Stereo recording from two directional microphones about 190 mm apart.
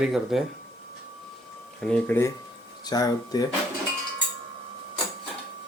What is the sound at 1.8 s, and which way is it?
Speech, 5° left (ahead or behind).